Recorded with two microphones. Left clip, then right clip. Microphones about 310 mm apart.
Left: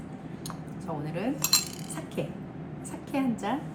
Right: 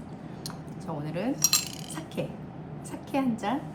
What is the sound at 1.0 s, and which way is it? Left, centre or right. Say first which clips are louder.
Cutlery: right 5 dB; centre.